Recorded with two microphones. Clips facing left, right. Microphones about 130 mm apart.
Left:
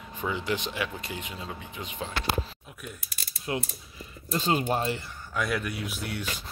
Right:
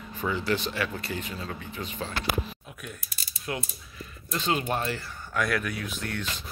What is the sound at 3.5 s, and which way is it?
Speech, 25° left (ahead or behind).